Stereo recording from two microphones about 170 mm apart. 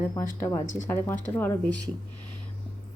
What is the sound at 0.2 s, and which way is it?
Speech, 15° left (ahead or behind).